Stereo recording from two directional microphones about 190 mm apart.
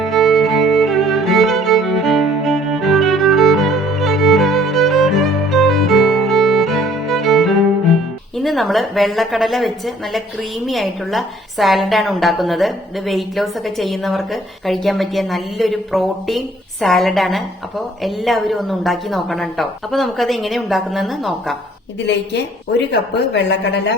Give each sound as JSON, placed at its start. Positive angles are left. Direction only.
{"t": 0.0, "sound": "music", "side_deg": 0}
{"t": 8.4, "sound": "a woman's voice", "side_deg": 0}
{"t": 22.9, "sound": "a woman's voice", "side_deg": 70}